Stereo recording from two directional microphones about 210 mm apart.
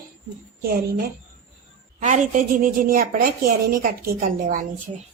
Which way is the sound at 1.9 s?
35° right (ahead or behind).